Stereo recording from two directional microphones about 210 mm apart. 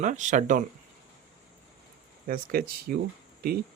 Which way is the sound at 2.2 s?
45° right (ahead or behind).